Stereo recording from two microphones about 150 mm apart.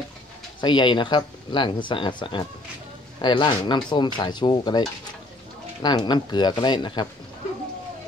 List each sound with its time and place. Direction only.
0.6 s speech: 30° left (ahead or behind)